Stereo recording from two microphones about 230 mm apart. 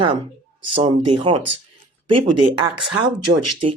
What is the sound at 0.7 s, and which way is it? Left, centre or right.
Speech, right.